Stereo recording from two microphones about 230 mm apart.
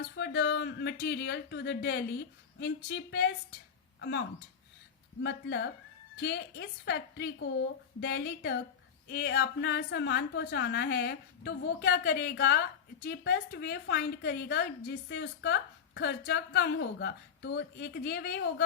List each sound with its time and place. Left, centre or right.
0.0 s a woman's voice: left
5.2 s a woman's voice: left